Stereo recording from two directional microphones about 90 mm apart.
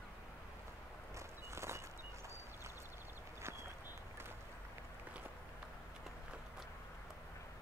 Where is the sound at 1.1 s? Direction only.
30° right (ahead or behind).